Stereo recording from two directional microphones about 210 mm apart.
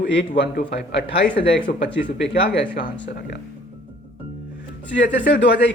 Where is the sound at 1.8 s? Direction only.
55° left (ahead or behind).